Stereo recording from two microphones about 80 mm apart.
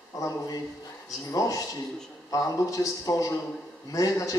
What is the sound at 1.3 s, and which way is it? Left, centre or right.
Speech, left.